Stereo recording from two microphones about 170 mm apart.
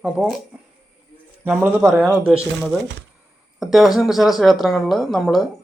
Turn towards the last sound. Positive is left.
turn(degrees=0)  # may be behind; listen again after turning